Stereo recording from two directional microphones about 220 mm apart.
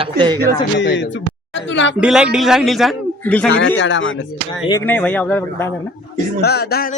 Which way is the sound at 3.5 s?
55° left (ahead or behind).